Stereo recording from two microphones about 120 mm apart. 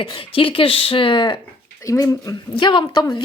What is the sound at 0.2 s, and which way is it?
Speech, 50° left (ahead or behind).